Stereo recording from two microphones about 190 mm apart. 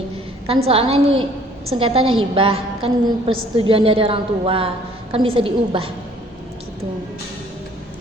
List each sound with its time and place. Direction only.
0.4 s a woman's voice: 30° right (ahead or behind)